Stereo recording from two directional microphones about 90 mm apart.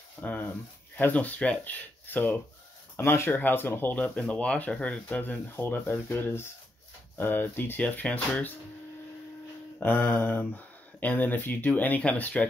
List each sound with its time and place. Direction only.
0.2 s a sound: 15° left (ahead or behind)
0.9 s speech: 15° left (ahead or behind)
9.8 s speech: 20° left (ahead or behind)